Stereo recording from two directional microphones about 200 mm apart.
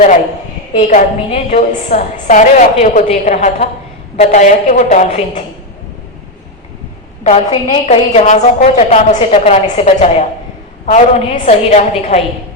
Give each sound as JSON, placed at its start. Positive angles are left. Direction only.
{"t": 0.8, "sound": "a woman's voice", "side_deg": 35}
{"t": 7.3, "sound": "a woman's voice", "side_deg": 35}